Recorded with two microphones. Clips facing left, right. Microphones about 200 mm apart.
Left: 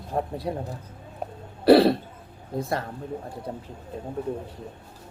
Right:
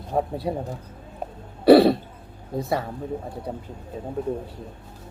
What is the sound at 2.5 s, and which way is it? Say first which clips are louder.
Speech: right 2 dB; centre (ahead or behind).